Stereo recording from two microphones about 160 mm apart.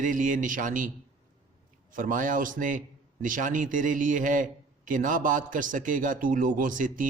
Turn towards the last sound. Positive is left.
turn(degrees=-55)  # may be behind; listen again after turning